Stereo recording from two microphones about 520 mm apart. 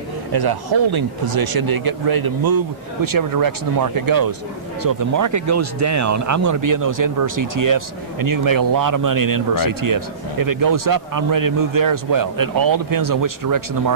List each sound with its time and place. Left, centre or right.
0.3 s speech: right